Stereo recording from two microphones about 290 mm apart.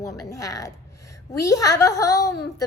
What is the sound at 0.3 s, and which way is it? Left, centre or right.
A woman's voice, centre.